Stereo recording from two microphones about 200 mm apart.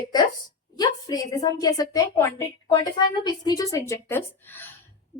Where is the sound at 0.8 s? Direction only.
20° left (ahead or behind).